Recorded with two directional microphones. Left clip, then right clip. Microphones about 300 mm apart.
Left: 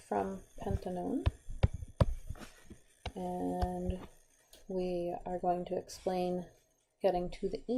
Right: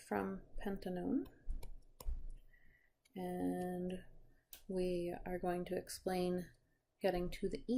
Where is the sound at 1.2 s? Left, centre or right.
Centre.